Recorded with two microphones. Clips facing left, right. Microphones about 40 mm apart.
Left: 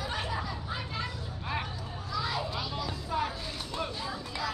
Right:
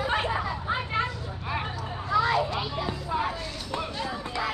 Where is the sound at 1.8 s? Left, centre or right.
Right.